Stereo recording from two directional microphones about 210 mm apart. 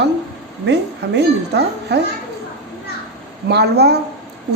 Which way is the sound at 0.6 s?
55° right (ahead or behind).